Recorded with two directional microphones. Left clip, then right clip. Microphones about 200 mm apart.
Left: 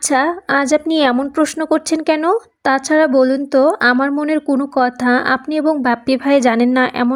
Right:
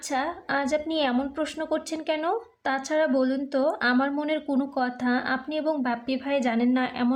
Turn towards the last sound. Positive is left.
turn(degrees=45)  # may be behind; listen again after turning